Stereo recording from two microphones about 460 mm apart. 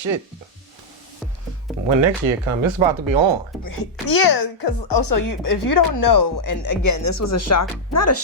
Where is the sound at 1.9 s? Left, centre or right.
Right.